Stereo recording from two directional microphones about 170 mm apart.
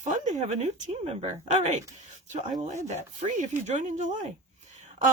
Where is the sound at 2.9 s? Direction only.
45° right (ahead or behind).